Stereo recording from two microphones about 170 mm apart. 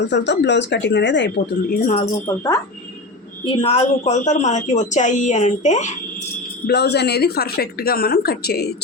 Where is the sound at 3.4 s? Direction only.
35° left (ahead or behind).